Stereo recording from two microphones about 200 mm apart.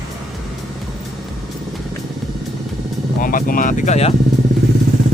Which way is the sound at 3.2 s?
45° left (ahead or behind).